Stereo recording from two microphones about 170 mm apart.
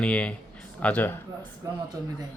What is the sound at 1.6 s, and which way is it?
Speech, 15° right (ahead or behind).